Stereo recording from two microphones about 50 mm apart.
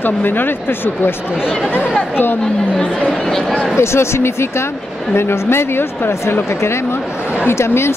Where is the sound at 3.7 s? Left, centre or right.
Left.